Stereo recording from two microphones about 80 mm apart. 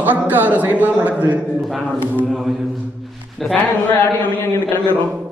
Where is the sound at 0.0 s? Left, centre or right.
Right.